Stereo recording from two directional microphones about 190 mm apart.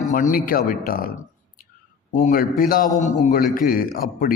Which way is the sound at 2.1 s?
45° left (ahead or behind).